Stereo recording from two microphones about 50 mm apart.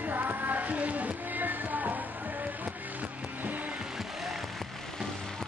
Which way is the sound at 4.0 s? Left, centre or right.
Centre.